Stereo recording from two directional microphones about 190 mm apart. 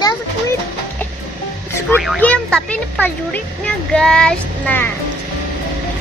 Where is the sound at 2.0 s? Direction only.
5° left (ahead or behind).